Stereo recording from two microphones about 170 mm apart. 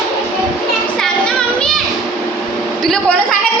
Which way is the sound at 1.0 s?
5° left (ahead or behind).